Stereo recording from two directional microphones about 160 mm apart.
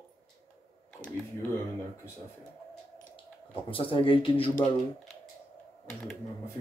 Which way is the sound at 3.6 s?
35° left (ahead or behind).